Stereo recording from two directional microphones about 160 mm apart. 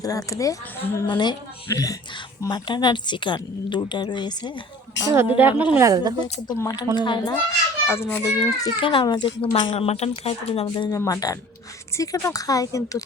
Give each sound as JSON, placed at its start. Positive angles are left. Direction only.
{"t": 0.0, "sound": "a woman's voice", "side_deg": 20}
{"t": 5.4, "sound": "speech", "side_deg": -10}
{"t": 6.5, "sound": "a woman's voice", "side_deg": 25}
{"t": 7.9, "sound": "a child's voice", "side_deg": 15}
{"t": 10.9, "sound": "a woman's voice", "side_deg": 20}